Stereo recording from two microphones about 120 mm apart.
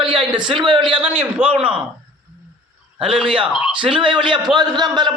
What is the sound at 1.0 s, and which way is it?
Speech, 10° right (ahead or behind).